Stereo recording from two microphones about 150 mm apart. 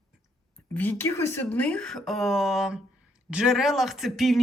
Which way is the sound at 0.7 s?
10° left (ahead or behind).